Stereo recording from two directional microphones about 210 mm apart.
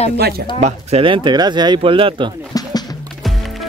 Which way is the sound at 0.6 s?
30° right (ahead or behind).